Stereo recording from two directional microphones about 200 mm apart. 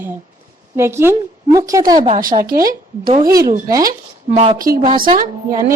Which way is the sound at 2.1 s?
45° right (ahead or behind).